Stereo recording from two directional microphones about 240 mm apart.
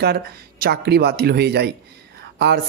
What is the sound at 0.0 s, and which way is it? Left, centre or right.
Speech, right.